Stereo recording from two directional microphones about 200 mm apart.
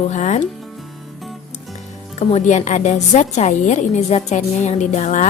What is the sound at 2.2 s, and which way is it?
A woman's voice, 35° left (ahead or behind).